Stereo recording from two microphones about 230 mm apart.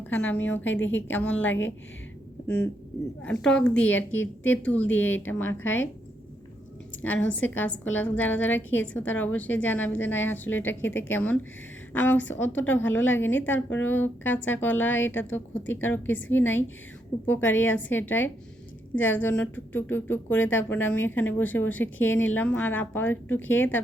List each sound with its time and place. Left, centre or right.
0.0 s a woman's voice: centre
0.6 s a woman's voice: left
1.1 s a woman's voice: centre
3.2 s a woman's voice: centre
7.3 s a woman's voice: centre
12.8 s a woman's voice: left
13.1 s a woman's voice: centre